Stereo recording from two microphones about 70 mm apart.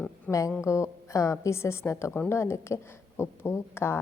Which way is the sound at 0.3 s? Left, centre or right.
Left.